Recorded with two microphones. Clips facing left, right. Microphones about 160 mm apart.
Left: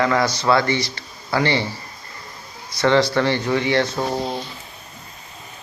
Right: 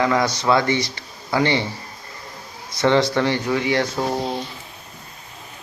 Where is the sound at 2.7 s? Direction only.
20° right (ahead or behind).